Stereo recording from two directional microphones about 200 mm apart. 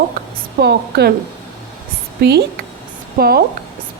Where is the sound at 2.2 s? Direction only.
55° right (ahead or behind).